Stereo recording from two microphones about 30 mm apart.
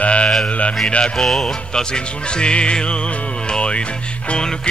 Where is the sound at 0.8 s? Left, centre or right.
Left.